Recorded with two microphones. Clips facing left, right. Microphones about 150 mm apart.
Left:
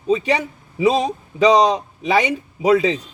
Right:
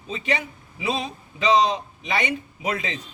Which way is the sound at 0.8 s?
40° left (ahead or behind).